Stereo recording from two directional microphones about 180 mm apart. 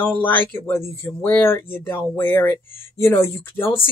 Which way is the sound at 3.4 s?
30° left (ahead or behind).